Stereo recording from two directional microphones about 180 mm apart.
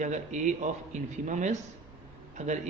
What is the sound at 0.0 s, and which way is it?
A man's voice, 40° right (ahead or behind).